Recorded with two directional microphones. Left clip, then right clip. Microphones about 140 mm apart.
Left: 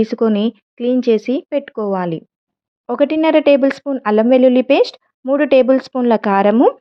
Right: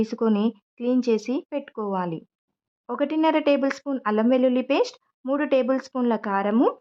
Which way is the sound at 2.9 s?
30° left (ahead or behind).